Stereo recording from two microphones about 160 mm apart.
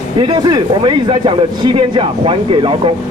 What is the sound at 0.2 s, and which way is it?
Speech, 25° right (ahead or behind).